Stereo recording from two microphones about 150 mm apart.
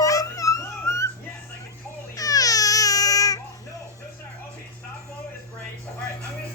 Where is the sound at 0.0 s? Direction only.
20° left (ahead or behind).